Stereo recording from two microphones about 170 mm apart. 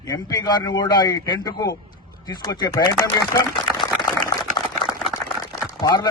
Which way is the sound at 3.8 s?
20° left (ahead or behind).